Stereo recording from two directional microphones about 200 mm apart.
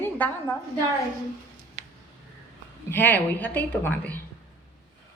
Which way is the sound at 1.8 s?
35° right (ahead or behind).